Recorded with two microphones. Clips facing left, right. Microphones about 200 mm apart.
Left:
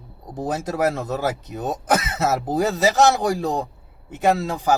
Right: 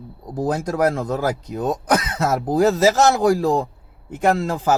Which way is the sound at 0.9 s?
90° right.